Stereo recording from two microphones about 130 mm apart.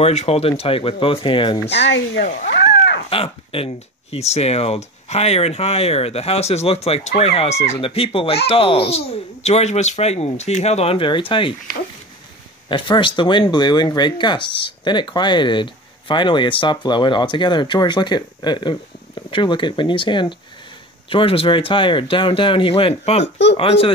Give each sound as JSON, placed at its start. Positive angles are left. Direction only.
{"t": 0.0, "sound": "speech", "side_deg": 55}
{"t": 3.1, "sound": "speech", "side_deg": 45}
{"t": 7.8, "sound": "speech", "side_deg": 45}
{"t": 12.6, "sound": "speech", "side_deg": 35}